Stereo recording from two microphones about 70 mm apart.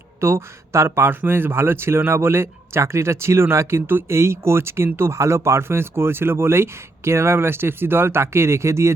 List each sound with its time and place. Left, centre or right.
0.2 s speech: right